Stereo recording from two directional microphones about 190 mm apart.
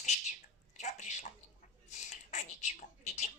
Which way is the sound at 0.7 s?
40° left (ahead or behind).